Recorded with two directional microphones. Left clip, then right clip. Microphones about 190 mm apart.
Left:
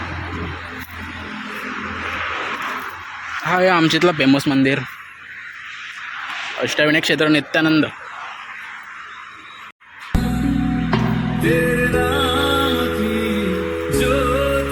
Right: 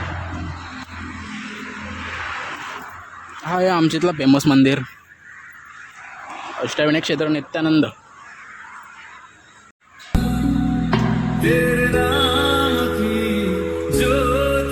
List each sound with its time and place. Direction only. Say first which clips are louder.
3.4 s speech: left 3 dB; 10° right (ahead or behind)
4.3 s speech: right 1 dB; 20° right (ahead or behind)
6.2 s a sound: left 4 dB; 45° right (ahead or behind)
6.6 s speech: left 2 dB; 10° right (ahead or behind)
7.2 s speech: left 5 dB; 5° left (ahead or behind)
7.6 s speech: left 1 dB; 15° right (ahead or behind)
10.1 s music: even; centre (ahead or behind)